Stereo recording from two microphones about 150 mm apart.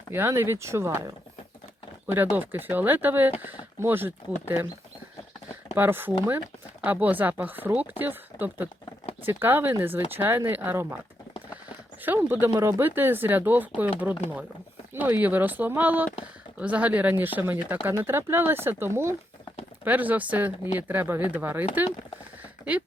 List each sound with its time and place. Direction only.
0.1 s speech: 15° right (ahead or behind)
2.0 s speech: 15° right (ahead or behind)
5.7 s speech: 15° right (ahead or behind)
12.0 s speech: 15° right (ahead or behind)
14.9 s speech: 10° right (ahead or behind)